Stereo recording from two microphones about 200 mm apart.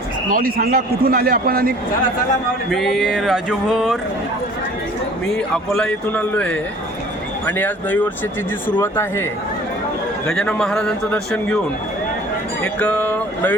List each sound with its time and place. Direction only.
0.3 s a man's voice: 45° right (ahead or behind)
2.6 s a man's voice: centre (ahead or behind)
5.7 s a man's voice: 5° left (ahead or behind)
10.2 s a man's voice: 5° left (ahead or behind)
12.6 s a man's voice: 5° left (ahead or behind)